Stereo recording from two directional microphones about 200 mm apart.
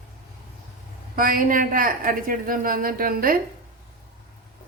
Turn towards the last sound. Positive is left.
turn(degrees=-45)  # may be behind; listen again after turning